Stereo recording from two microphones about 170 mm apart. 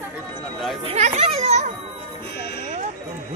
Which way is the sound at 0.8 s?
40° right (ahead or behind).